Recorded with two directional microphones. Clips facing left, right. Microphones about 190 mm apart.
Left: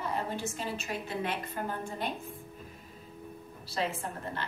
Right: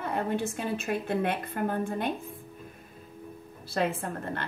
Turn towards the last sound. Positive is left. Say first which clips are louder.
# right 4 dB
turn(degrees=-55)  # may be behind; listen again after turning